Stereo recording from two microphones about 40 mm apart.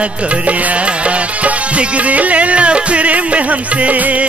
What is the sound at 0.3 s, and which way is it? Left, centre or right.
Music, right.